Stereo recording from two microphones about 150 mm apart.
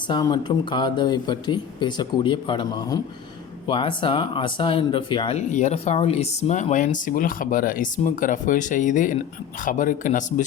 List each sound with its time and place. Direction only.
0.1 s speech: 30° left (ahead or behind)
5.4 s speech: 50° left (ahead or behind)